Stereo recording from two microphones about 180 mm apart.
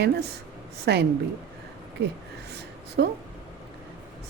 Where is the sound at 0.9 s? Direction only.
70° right (ahead or behind).